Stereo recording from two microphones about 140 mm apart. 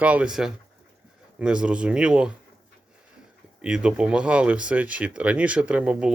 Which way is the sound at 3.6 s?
5° right (ahead or behind).